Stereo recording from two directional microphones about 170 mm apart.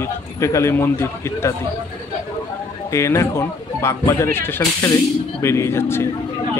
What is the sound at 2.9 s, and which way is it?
Speech, 15° left (ahead or behind).